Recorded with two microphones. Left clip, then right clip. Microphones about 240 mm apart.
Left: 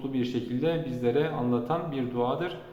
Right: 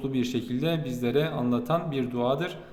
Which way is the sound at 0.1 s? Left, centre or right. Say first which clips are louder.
Right 1 dB; right.